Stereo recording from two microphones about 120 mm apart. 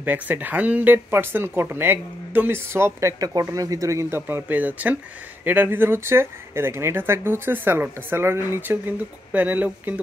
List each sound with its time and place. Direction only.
0.0 s speech: 15° right (ahead or behind)